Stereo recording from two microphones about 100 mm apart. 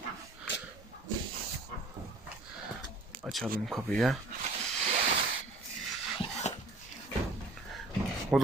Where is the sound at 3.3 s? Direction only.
Centre (ahead or behind).